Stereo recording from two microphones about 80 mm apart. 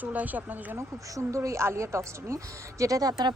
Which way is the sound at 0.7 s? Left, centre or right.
Right.